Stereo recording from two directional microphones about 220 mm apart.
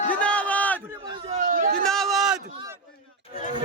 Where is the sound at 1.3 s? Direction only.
35° right (ahead or behind).